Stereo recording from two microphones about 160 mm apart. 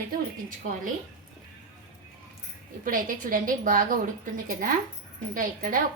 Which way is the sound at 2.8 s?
60° right (ahead or behind).